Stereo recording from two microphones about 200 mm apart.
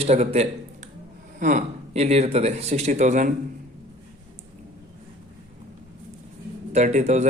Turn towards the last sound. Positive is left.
turn(degrees=-35)  # may be behind; listen again after turning